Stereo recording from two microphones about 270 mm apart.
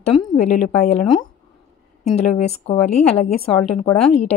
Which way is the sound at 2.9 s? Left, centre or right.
Left.